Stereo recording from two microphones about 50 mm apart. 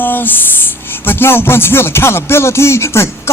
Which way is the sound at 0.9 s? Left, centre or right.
Left.